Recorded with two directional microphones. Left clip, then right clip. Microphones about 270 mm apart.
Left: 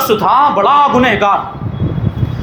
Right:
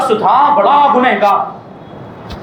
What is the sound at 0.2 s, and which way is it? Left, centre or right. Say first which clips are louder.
A man's voice: right 2 dB; left.